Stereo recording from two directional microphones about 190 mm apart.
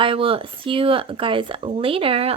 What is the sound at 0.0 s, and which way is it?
Speech, 25° right (ahead or behind).